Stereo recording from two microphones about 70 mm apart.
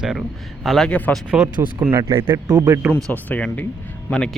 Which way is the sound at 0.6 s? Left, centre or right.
Centre.